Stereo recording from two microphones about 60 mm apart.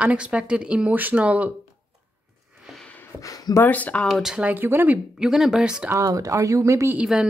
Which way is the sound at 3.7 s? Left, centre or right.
Left.